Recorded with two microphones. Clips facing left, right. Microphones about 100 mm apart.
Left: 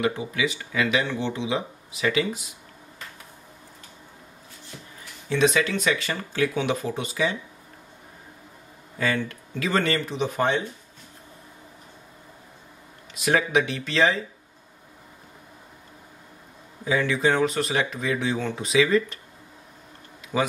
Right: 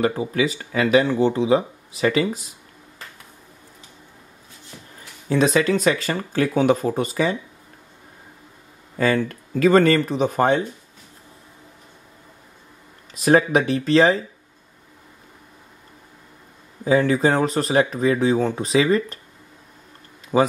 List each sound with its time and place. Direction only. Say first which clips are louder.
0.0 s speech: right 5 dB; 40° right (ahead or behind)
5.3 s speech: right 4 dB; 40° right (ahead or behind)
8.9 s speech: right 6 dB; 40° right (ahead or behind)
13.1 s speech: right 5 dB; 40° right (ahead or behind)
16.8 s speech: right 5 dB; 40° right (ahead or behind)
20.3 s speech: right 7 dB; 35° right (ahead or behind)